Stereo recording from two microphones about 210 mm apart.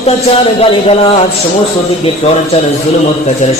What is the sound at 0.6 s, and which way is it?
Speech, 30° left (ahead or behind).